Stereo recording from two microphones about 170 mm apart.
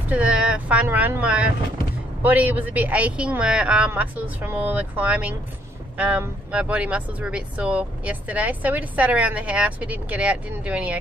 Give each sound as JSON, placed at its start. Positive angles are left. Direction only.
{"t": 0.1, "sound": "speech", "side_deg": -5}